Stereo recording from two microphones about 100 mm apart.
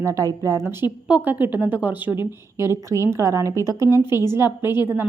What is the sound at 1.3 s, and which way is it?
A woman's voice, 20° right (ahead or behind).